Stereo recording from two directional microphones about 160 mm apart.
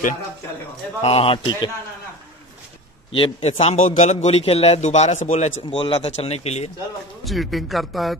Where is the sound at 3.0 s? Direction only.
35° left (ahead or behind).